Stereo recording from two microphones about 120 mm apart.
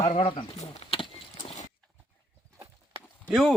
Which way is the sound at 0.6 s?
50° left (ahead or behind).